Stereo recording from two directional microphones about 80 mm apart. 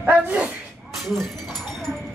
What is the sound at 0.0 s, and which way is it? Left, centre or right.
Bow-wow, centre.